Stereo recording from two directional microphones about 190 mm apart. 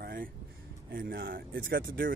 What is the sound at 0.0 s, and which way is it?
Vehicle, 50° right (ahead or behind).